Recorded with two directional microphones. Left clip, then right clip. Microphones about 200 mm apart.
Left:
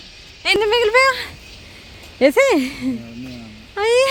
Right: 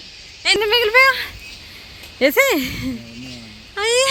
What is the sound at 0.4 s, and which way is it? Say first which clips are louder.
Speech: even; 10° left (ahead or behind).